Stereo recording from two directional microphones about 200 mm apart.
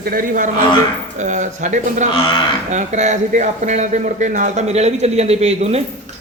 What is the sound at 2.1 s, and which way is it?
Speech, 25° left (ahead or behind).